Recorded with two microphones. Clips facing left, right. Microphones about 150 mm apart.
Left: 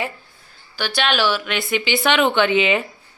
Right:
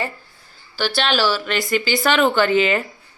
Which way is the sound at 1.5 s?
Centre (ahead or behind).